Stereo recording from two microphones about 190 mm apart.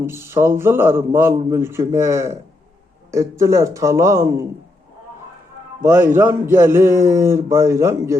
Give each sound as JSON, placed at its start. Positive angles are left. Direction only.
{"t": 0.0, "sound": "a man's voice", "side_deg": -15}
{"t": 5.8, "sound": "a man's voice", "side_deg": -10}